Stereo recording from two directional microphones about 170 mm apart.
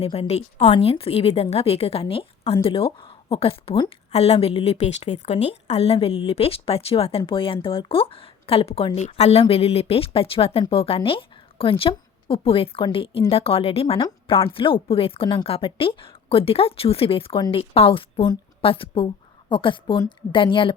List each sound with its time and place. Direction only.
0.0 s a woman's voice: 35° left (ahead or behind)